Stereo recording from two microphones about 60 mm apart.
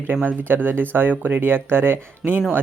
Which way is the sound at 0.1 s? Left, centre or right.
Right.